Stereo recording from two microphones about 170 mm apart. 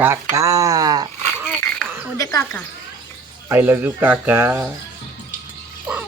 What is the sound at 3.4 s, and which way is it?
Speech, 15° right (ahead or behind).